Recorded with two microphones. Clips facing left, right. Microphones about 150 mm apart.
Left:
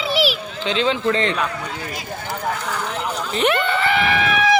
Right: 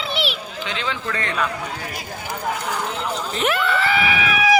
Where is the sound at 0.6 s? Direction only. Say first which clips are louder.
Left 9 dB; 20° left (ahead or behind).